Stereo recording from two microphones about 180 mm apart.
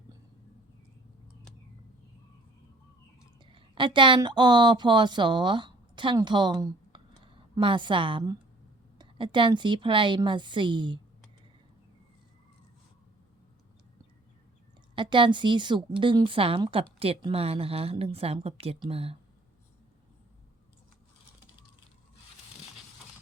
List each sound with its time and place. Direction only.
3.4 s a woman's voice: 25° right (ahead or behind)
14.9 s a woman's voice: 25° right (ahead or behind)